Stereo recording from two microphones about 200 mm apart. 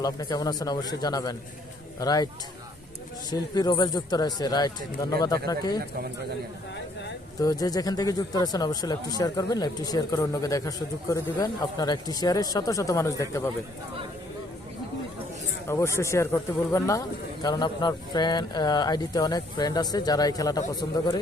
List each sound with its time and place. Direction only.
0.0 s speech: 20° left (ahead or behind)
7.4 s speech: 20° left (ahead or behind)
15.6 s speech: 15° left (ahead or behind)